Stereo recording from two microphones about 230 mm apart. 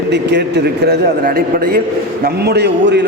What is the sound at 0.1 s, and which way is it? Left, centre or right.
A man's voice, right.